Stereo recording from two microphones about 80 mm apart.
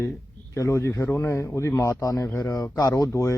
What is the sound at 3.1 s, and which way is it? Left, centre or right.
Speech, left.